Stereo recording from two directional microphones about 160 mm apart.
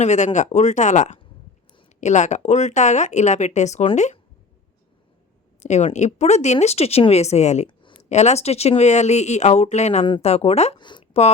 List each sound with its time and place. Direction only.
0.0 s speech: 45° left (ahead or behind)
5.6 s speech: 45° left (ahead or behind)
10.8 s a sound: 30° left (ahead or behind)